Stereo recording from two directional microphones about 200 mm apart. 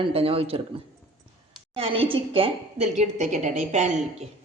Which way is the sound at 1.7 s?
25° right (ahead or behind).